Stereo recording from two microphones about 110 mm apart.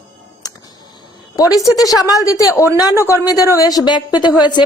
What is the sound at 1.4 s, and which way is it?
A woman's voice, 35° left (ahead or behind).